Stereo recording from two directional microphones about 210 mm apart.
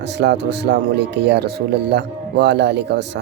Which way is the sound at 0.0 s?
55° right (ahead or behind).